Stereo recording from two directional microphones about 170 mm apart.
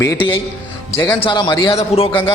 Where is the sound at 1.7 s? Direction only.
35° left (ahead or behind).